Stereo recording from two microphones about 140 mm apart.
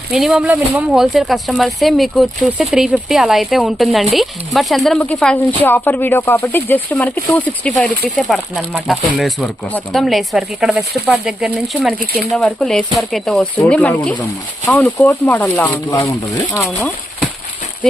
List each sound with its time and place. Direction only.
0.1 s speech: 5° right (ahead or behind)
15.9 s speech: 20° left (ahead or behind)